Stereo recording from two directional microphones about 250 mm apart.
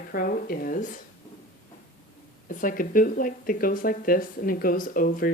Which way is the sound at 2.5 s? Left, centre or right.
Left.